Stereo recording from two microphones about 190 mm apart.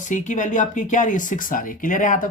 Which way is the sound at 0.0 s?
40° left (ahead or behind).